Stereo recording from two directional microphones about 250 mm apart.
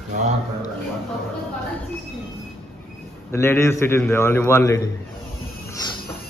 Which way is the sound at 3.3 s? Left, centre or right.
Centre.